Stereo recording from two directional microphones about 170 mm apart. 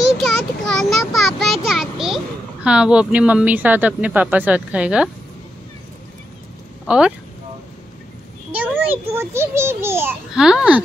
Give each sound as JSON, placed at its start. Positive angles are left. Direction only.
{"t": 0.2, "sound": "a sound", "side_deg": 5}
{"t": 6.9, "sound": "a child's voice", "side_deg": -5}
{"t": 8.5, "sound": "a child's voice", "side_deg": -10}
{"t": 10.3, "sound": "a child's voice", "side_deg": -5}